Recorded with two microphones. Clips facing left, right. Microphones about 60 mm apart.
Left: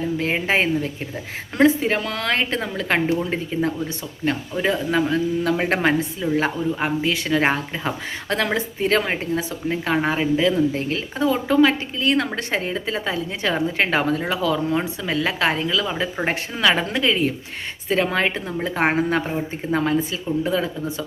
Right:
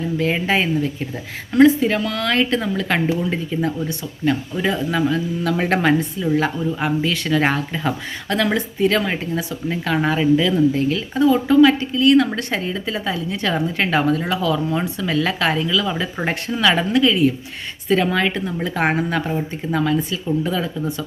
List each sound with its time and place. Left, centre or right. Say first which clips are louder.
0.3 s speech: right 1 dB; left
5.5 s speech: right 2 dB; left